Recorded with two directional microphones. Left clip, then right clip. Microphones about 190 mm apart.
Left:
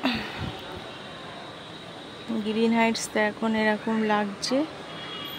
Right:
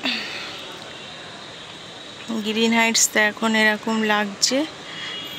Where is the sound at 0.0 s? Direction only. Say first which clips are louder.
Right 3 dB; 25° left (ahead or behind).